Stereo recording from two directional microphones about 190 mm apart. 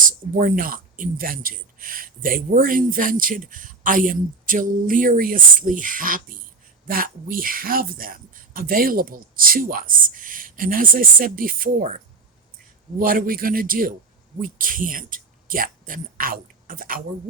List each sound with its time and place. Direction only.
0.0 s speech: 45° right (ahead or behind)